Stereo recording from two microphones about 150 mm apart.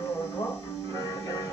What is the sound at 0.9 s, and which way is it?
Music, 25° left (ahead or behind).